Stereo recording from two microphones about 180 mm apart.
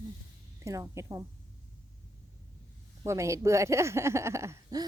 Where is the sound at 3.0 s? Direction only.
15° right (ahead or behind).